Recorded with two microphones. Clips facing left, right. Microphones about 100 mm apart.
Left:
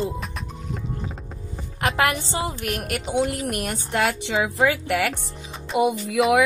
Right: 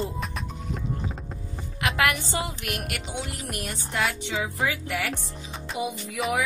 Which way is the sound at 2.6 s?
40° left (ahead or behind).